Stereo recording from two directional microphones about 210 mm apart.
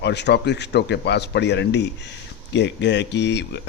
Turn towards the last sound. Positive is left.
turn(degrees=55)  # may be behind; listen again after turning